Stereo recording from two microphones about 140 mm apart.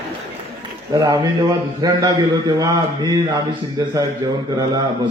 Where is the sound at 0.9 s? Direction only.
25° right (ahead or behind).